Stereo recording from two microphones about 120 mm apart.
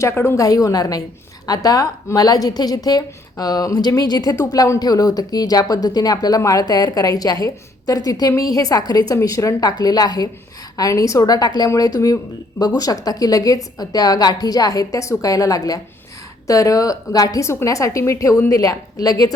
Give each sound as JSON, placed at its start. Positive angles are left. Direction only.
{"t": 0.0, "sound": "a woman's voice", "side_deg": 20}